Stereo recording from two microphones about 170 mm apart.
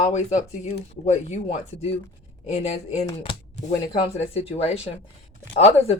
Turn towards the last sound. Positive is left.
turn(degrees=40)  # may be behind; listen again after turning